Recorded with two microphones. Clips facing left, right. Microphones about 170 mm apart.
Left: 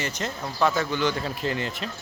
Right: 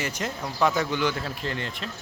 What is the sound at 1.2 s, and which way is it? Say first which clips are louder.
Speech: left 3 dB; 5° left (ahead or behind).